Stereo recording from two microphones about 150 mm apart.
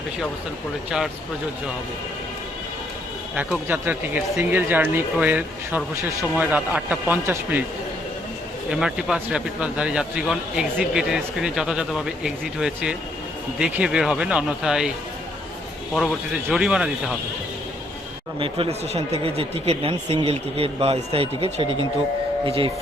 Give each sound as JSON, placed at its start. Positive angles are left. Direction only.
{"t": 0.9, "sound": "speech", "side_deg": -5}
{"t": 3.3, "sound": "speech", "side_deg": -10}
{"t": 8.7, "sound": "speech", "side_deg": -5}
{"t": 16.0, "sound": "speech", "side_deg": 0}
{"t": 18.3, "sound": "speech", "side_deg": -35}